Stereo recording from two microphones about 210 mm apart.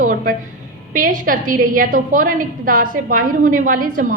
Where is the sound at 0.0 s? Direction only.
40° right (ahead or behind).